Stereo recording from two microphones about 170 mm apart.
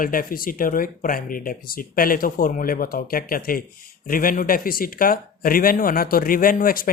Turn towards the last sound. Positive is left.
turn(degrees=55)  # may be behind; listen again after turning